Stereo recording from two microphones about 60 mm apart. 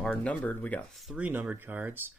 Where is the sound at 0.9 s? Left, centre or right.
Centre.